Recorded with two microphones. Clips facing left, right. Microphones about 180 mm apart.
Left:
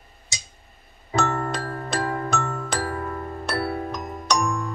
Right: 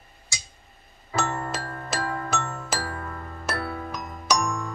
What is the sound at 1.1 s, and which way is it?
Music, 5° right (ahead or behind).